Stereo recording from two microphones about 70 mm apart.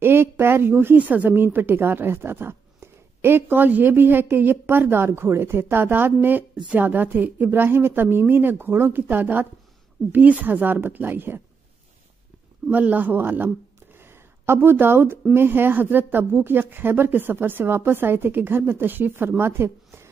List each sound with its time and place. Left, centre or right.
0.0 s a woman's voice: right
12.6 s a woman's voice: right